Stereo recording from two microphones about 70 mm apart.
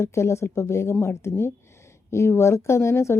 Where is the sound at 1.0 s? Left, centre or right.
Left.